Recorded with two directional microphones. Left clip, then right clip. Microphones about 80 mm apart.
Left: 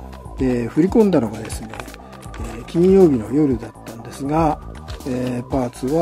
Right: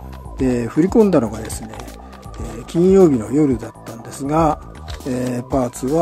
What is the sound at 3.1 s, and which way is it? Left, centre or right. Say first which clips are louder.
Speech: right 1 dB; right.